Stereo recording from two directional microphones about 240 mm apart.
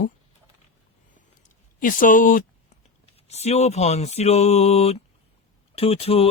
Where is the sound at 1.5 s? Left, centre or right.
Left.